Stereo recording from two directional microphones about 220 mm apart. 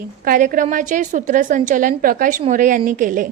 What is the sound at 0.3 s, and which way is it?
A woman's voice, 35° right (ahead or behind).